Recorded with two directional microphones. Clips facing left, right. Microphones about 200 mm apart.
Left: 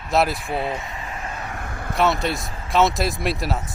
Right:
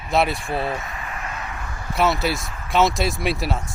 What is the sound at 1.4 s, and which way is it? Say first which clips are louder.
Vehicle: left 2 dB; 50° left (ahead or behind).